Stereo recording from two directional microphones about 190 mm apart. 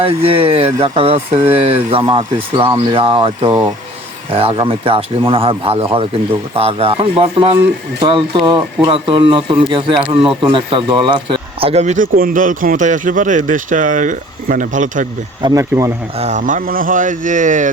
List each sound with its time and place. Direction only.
0.3 s speech: 30° right (ahead or behind)
15.4 s speech: 20° right (ahead or behind)
16.1 s speech: 35° right (ahead or behind)